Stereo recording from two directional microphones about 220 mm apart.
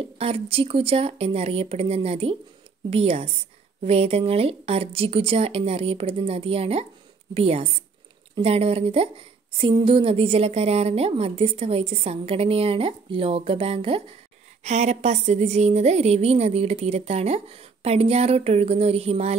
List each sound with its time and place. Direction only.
0.0 s a woman's voice: 25° right (ahead or behind)